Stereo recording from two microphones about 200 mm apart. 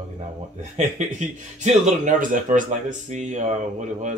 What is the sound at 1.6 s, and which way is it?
Speech, 35° right (ahead or behind).